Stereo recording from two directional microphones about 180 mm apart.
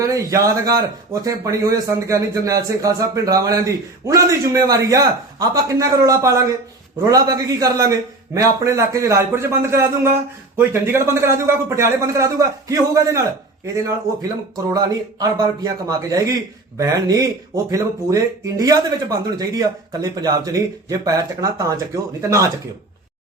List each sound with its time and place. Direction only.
0.0 s a man's voice: 20° right (ahead or behind)